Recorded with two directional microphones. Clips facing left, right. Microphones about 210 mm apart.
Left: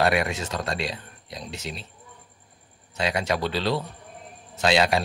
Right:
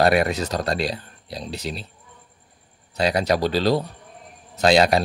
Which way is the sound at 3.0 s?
35° right (ahead or behind).